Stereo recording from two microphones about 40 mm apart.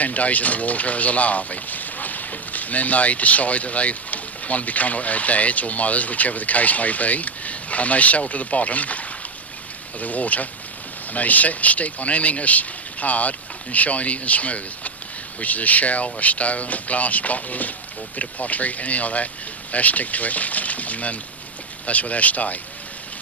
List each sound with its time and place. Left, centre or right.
0.0 s speech: left